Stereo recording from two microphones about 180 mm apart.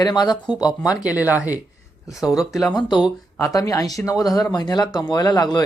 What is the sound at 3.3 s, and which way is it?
Speech, 15° left (ahead or behind).